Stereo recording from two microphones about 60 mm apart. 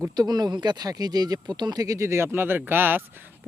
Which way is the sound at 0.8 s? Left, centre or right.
Right.